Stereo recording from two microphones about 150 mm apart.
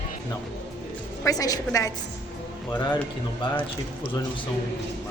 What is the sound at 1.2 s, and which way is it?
Speech, 25° left (ahead or behind).